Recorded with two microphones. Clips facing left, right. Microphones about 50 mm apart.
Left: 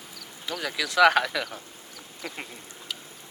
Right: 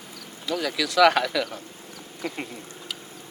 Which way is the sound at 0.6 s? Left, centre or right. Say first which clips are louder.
Right 1 dB; left.